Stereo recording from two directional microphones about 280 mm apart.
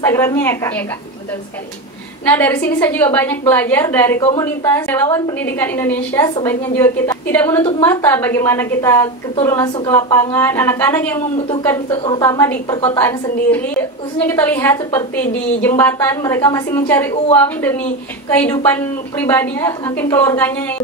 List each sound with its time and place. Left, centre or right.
0.0 s a woman's voice: centre
2.2 s a woman's voice: centre
4.2 s a woman's voice: centre